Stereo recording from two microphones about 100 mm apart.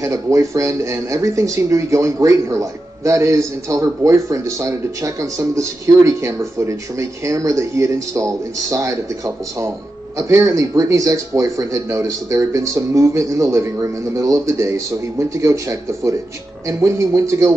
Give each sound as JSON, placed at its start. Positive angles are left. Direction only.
{"t": 0.0, "sound": "speech", "side_deg": -30}